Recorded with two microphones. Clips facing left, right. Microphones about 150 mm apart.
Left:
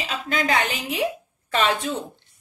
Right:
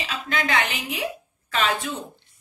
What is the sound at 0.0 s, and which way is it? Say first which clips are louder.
A woman's voice: left 2 dB; 35° left (ahead or behind).